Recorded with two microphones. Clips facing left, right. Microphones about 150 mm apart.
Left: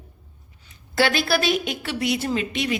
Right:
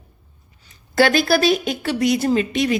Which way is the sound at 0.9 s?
45° right (ahead or behind).